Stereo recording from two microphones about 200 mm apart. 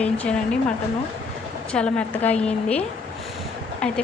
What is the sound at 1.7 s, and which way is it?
A woman's voice, 5° left (ahead or behind).